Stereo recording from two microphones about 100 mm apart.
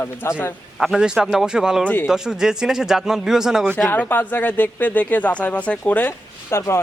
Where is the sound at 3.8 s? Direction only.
15° left (ahead or behind).